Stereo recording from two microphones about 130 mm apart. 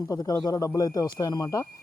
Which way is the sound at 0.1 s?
25° left (ahead or behind).